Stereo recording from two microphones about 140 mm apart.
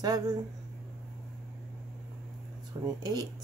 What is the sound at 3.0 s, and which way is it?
Speech, 30° right (ahead or behind).